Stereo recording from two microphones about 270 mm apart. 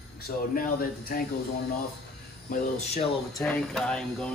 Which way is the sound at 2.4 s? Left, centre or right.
Left.